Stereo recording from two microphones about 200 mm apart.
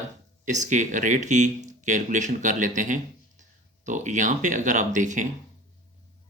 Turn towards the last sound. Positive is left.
turn(degrees=-40)  # may be behind; listen again after turning